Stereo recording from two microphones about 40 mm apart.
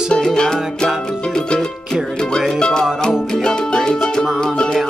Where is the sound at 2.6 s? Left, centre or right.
Centre.